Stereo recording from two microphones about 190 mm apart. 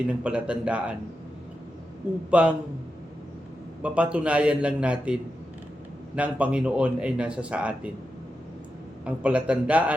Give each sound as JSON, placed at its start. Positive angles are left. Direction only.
{"t": 0.1, "sound": "a man's voice", "side_deg": -5}
{"t": 2.3, "sound": "a man's voice", "side_deg": -5}
{"t": 3.8, "sound": "a man's voice", "side_deg": -5}
{"t": 9.0, "sound": "speech", "side_deg": -5}